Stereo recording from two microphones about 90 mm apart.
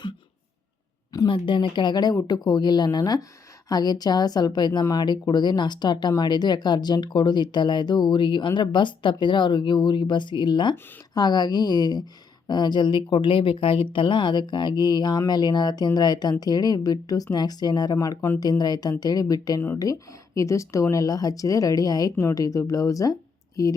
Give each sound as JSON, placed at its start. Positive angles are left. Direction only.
{"t": 1.3, "sound": "speech", "side_deg": 70}
{"t": 17.9, "sound": "speech", "side_deg": 40}